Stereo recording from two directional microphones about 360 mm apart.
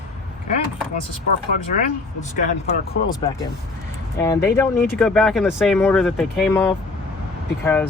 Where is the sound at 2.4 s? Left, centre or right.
Centre.